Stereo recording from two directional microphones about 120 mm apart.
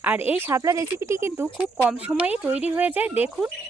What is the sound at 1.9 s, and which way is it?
Speech, 10° right (ahead or behind).